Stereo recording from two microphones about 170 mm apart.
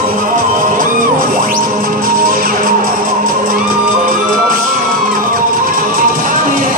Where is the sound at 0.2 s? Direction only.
50° right (ahead or behind).